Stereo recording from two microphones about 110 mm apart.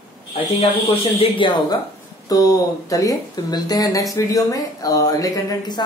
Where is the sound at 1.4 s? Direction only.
50° left (ahead or behind).